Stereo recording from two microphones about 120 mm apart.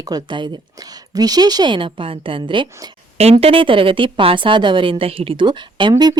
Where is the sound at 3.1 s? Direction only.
60° right (ahead or behind).